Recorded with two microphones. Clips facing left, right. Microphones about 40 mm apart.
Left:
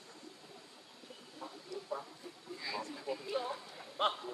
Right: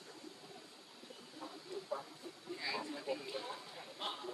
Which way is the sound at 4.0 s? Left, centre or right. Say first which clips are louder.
Left 11 dB; left.